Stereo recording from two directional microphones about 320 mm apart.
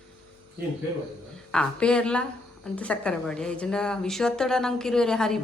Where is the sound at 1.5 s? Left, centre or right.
Centre.